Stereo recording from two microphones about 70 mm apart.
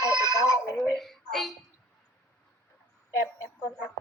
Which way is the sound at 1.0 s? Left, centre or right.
Centre.